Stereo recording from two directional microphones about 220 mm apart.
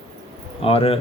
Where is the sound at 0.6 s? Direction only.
25° left (ahead or behind).